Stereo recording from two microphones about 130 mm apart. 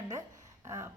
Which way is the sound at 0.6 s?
25° right (ahead or behind).